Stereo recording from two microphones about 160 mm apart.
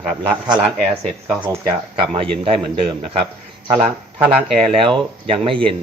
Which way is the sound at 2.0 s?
35° right (ahead or behind).